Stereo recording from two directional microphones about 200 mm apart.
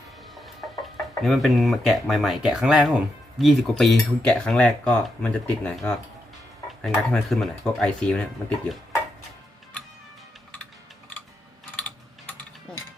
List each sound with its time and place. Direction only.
0.4 s speech: centre (ahead or behind)